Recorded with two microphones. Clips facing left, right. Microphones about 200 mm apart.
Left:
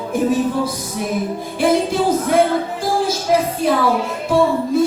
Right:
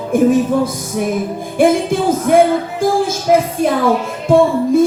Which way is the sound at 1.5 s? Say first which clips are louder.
Right 4 dB; 50° right (ahead or behind).